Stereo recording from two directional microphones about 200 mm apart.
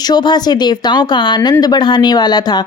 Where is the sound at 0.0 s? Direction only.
20° left (ahead or behind).